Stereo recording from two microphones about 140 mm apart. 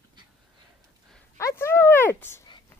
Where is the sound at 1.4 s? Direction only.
20° left (ahead or behind).